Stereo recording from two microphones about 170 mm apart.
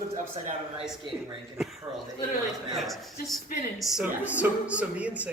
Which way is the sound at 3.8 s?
5° right (ahead or behind).